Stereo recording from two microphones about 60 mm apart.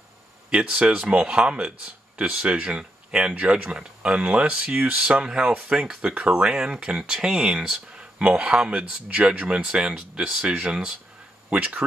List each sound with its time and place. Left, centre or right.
0.5 s speech: centre
5.0 s speech: centre